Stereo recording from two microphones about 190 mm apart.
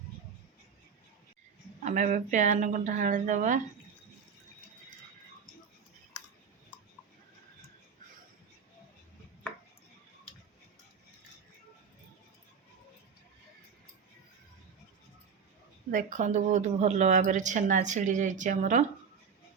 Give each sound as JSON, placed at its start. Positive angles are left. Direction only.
{"t": 1.8, "sound": "speech", "side_deg": -40}
{"t": 15.9, "sound": "speech", "side_deg": -40}